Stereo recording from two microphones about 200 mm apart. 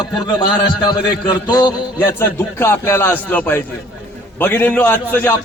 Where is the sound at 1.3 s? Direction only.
20° left (ahead or behind).